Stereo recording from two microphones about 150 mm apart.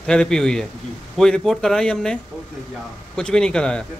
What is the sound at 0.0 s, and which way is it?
Speech, 5° left (ahead or behind).